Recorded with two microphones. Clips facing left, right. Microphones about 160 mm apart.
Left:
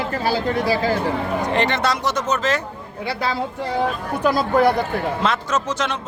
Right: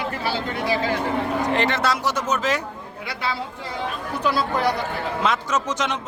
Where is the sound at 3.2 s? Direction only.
40° left (ahead or behind).